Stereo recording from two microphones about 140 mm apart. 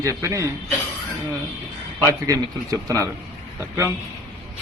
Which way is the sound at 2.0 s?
25° right (ahead or behind).